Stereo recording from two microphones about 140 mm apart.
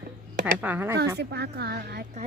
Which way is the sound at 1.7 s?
90° right.